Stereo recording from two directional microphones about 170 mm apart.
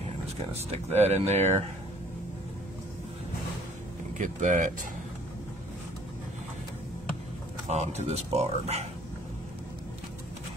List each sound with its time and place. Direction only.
0.9 s speech: 40° right (ahead or behind)
4.2 s speech: 50° right (ahead or behind)
7.6 s speech: 40° right (ahead or behind)